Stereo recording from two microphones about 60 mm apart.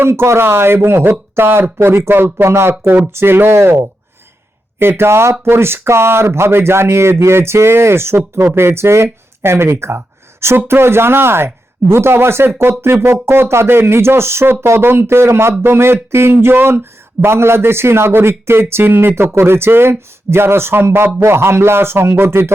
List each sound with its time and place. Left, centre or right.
0.0 s a man's voice: right